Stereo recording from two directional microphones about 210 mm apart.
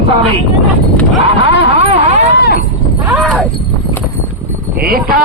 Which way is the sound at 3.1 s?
5° right (ahead or behind).